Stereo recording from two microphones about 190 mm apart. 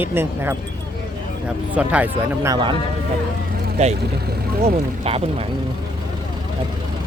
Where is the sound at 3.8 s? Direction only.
35° right (ahead or behind).